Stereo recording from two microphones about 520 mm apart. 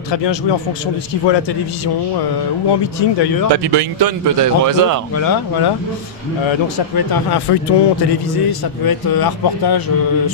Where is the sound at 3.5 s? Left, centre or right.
Right.